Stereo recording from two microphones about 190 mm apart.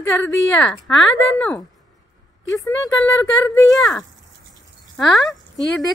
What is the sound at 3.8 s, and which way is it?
A woman's voice, centre (ahead or behind).